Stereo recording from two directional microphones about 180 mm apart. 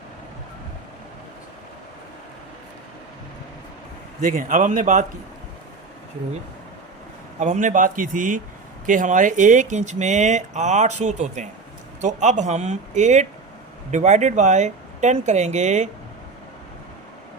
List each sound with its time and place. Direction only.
4.2 s a man's voice: 45° right (ahead or behind)
7.3 s a man's voice: 40° right (ahead or behind)